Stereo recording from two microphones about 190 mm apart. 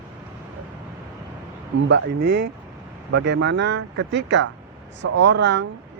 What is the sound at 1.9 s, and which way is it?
Speech, 65° right (ahead or behind).